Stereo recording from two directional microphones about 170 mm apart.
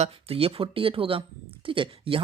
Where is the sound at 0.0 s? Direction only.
35° right (ahead or behind).